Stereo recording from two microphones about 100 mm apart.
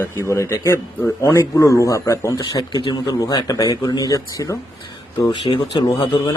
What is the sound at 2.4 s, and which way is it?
Speech, 45° left (ahead or behind).